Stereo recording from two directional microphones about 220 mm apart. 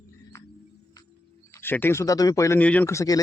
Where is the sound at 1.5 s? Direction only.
10° left (ahead or behind).